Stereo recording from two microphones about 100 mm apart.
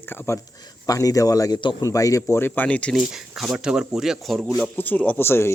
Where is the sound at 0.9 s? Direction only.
35° left (ahead or behind).